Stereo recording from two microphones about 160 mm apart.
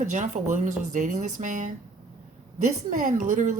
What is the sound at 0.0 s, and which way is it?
A woman's voice, 50° right (ahead or behind).